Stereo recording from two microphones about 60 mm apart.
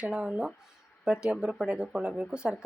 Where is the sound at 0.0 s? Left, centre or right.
Centre.